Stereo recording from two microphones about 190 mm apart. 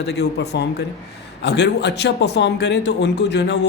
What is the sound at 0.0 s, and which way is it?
A man's voice, 60° left (ahead or behind).